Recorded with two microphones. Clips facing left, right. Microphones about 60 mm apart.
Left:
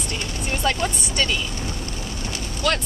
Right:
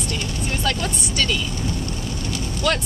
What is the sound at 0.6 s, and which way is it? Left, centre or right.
Speech, left.